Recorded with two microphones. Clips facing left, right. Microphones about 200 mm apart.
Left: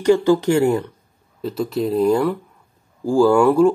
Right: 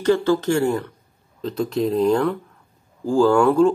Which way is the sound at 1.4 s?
5° left (ahead or behind).